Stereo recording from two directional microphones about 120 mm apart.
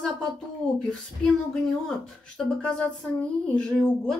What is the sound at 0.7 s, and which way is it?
Speech, 5° left (ahead or behind).